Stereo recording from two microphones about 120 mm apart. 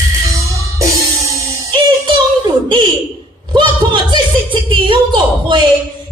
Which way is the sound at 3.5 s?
40° right (ahead or behind).